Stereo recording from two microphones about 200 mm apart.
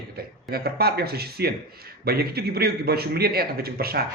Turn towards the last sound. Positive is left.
turn(degrees=-50)  # may be behind; listen again after turning